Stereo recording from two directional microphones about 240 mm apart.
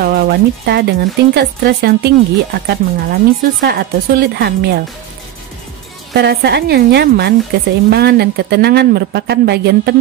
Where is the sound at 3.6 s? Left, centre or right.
Right.